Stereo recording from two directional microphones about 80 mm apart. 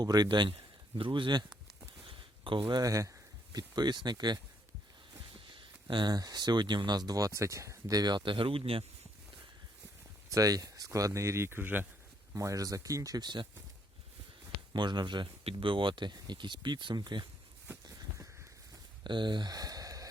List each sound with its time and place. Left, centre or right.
0.0 s speech: right
1.0 s speech: right
2.0 s a sound: right
2.8 s speech: right
3.5 s speech: right
5.5 s speech: right
10.2 s speech: right
12.3 s speech: right
14.7 s speech: right
16.1 s speech: right
19.0 s a sound: right